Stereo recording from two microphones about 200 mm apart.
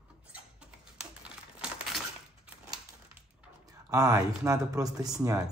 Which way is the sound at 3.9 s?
15° right (ahead or behind).